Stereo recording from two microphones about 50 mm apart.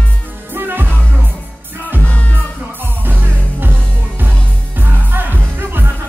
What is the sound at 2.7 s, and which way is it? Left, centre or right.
Music, right.